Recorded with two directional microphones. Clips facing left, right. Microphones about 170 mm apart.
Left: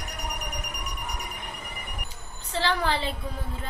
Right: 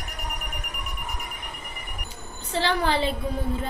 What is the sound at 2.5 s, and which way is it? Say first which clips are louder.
Speech: right 3 dB; 20° right (ahead or behind).